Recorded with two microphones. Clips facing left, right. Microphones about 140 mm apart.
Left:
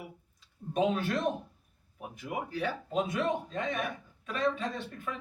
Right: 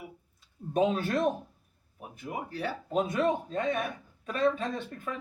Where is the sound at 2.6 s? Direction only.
40° right (ahead or behind).